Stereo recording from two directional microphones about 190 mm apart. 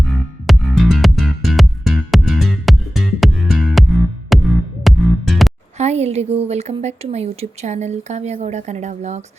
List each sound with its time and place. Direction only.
0.4 s music: centre (ahead or behind)
5.7 s a woman's voice: 35° right (ahead or behind)